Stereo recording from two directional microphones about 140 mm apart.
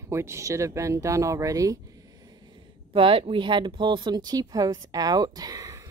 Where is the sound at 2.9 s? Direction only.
40° right (ahead or behind).